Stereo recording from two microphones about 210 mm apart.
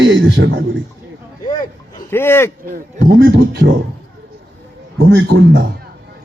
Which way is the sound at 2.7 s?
45° right (ahead or behind).